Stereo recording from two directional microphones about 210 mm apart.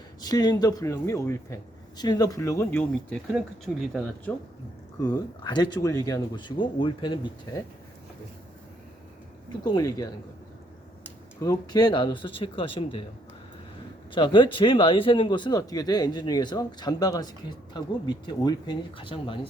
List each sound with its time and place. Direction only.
0.2 s a man's voice: 20° left (ahead or behind); by 4.1 s centre (ahead or behind)
4.9 s a man's voice: 20° left (ahead or behind)
9.5 s a man's voice: 20° left (ahead or behind)
11.3 s a man's voice: 15° left (ahead or behind)
14.1 s a man's voice: 25° left (ahead or behind)